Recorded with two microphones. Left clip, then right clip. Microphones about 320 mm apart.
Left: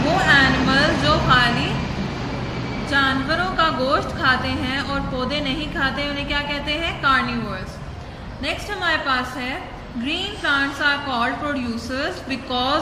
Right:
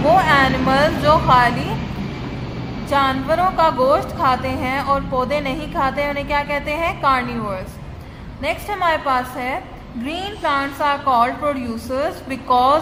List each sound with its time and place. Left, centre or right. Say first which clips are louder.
0.2 s vehicle: right 1 dB; centre
2.9 s a woman's voice: right 3 dB; centre